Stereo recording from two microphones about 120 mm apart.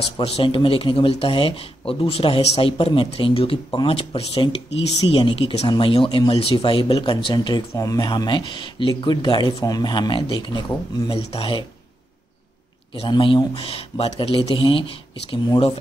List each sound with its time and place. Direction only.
0.2 s speech: 50° left (ahead or behind)
13.1 s speech: 40° left (ahead or behind)